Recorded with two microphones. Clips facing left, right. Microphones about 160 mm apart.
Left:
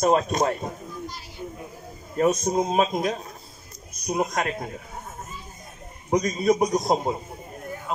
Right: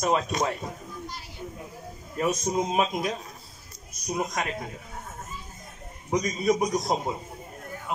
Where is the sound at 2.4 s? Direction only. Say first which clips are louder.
Left 3 dB; 45° left (ahead or behind).